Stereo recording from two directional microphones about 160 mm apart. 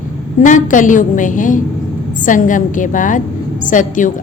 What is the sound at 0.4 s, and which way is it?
A woman's voice, 55° left (ahead or behind).